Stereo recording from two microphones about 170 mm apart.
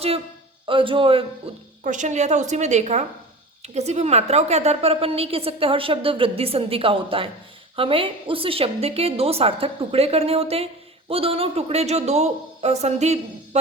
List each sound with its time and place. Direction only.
0.7 s a woman's voice: 30° right (ahead or behind)
1.8 s a woman's voice: 50° right (ahead or behind)